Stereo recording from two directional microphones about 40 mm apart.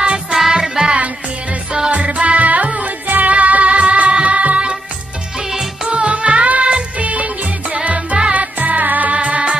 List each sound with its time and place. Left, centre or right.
0.3 s music: centre
0.9 s music: right
5.4 s music: centre
5.9 s music: right
7.0 s music of bollywood: right
7.8 s music: right